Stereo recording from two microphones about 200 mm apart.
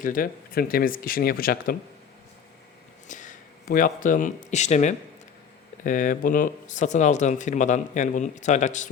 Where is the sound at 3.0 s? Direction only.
40° left (ahead or behind).